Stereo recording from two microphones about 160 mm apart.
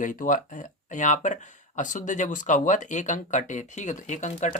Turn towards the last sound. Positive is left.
turn(degrees=50)  # may be behind; listen again after turning